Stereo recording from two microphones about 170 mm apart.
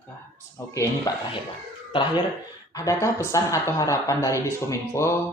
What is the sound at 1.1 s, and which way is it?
Speech, 20° left (ahead or behind).